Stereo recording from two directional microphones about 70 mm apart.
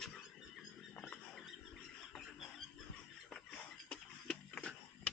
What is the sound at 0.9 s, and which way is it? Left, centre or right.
Rodents, centre.